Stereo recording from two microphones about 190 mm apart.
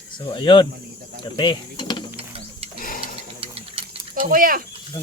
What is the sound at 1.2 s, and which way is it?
Mechanisms, 25° left (ahead or behind).